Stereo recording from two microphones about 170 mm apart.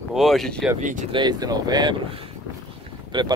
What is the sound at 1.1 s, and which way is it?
Speech, 25° right (ahead or behind).